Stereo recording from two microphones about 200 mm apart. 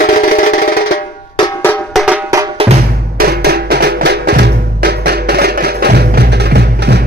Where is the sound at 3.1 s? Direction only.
50° right (ahead or behind).